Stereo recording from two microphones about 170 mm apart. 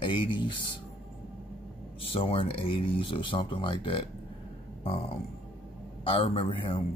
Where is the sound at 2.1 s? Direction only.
30° left (ahead or behind).